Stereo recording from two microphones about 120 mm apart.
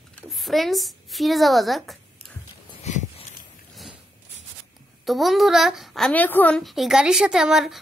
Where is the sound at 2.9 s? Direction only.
70° left (ahead or behind).